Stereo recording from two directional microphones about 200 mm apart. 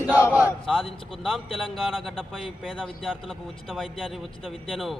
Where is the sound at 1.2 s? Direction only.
Centre (ahead or behind).